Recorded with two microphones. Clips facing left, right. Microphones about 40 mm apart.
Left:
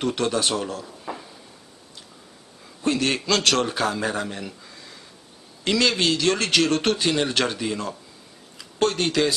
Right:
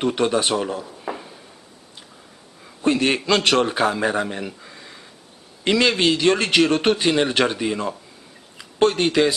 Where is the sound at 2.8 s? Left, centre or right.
Centre.